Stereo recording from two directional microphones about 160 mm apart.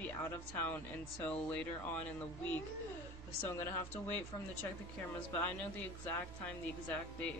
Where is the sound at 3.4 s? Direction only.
15° left (ahead or behind).